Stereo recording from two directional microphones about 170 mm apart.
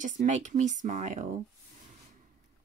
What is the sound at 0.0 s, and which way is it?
Speech, 45° right (ahead or behind).